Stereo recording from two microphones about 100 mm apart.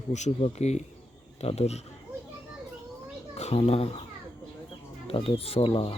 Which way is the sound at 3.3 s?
90° left.